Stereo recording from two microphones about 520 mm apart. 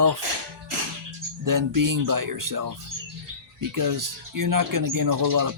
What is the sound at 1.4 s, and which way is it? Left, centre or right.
Speech, right.